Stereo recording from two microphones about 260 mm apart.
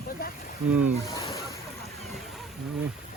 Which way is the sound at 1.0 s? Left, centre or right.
Centre.